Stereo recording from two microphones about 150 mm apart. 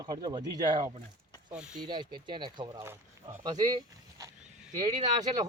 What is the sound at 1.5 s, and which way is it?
Speech, 5° right (ahead or behind).